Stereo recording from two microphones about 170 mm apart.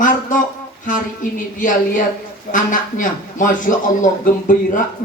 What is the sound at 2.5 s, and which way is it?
A man's voice, 50° left (ahead or behind).